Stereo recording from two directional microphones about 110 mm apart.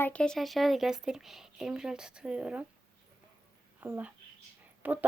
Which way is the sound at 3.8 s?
15° right (ahead or behind).